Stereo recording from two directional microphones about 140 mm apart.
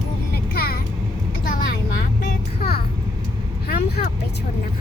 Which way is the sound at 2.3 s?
90° left.